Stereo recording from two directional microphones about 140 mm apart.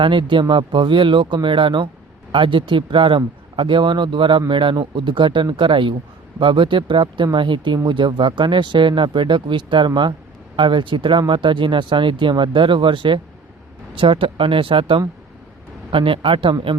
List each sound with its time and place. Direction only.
0.0 s speech: 35° right (ahead or behind)